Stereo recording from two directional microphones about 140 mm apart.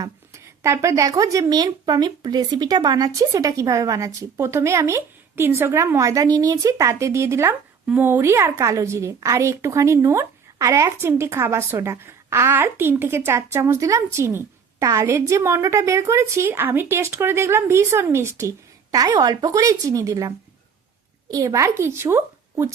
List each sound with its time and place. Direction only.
0.0 s a woman's voice: 20° right (ahead or behind)